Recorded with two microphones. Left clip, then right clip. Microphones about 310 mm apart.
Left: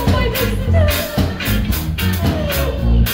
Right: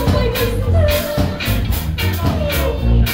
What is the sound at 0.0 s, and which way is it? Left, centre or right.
Music, centre.